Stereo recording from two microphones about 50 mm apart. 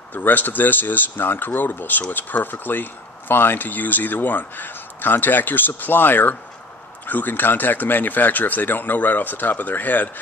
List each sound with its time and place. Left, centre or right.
0.1 s speech: left